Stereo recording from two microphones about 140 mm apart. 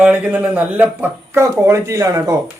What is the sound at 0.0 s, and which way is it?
Speech, 10° right (ahead or behind).